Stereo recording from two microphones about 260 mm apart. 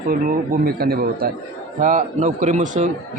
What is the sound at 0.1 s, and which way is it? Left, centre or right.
A man's voice, right.